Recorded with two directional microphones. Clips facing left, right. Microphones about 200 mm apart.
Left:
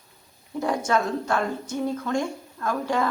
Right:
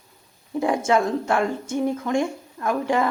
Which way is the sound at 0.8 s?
25° right (ahead or behind).